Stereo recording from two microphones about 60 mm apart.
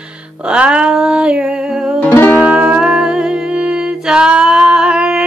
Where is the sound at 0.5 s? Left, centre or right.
Centre.